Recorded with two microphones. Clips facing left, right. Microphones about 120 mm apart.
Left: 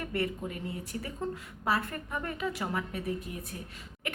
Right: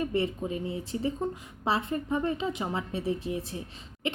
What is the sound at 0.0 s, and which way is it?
Speech, 20° right (ahead or behind).